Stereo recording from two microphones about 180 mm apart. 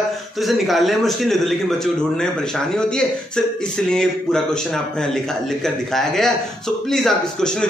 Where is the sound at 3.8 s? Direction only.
5° left (ahead or behind).